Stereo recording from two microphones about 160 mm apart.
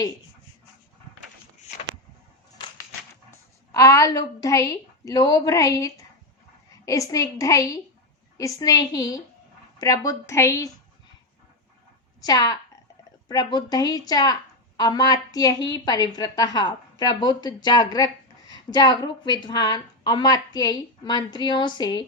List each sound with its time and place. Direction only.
3.7 s a woman's voice: 20° left (ahead or behind)
12.2 s a woman's voice: 25° left (ahead or behind)